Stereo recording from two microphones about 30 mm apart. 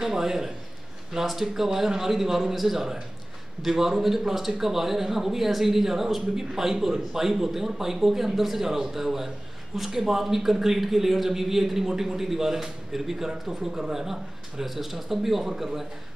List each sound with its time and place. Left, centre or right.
0.0 s speech: centre
13.7 s a man's voice: right
14.6 s speech: centre